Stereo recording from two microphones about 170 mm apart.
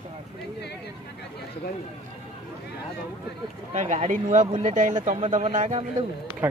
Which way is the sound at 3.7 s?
45° right (ahead or behind).